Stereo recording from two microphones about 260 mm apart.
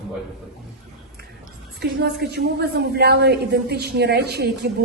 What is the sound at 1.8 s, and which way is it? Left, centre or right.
A woman's voice, right.